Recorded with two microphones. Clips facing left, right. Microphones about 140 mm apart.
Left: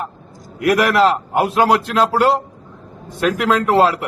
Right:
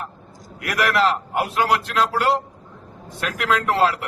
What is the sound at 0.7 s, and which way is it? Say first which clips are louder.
A man's voice: left 6 dB; 45° left (ahead or behind).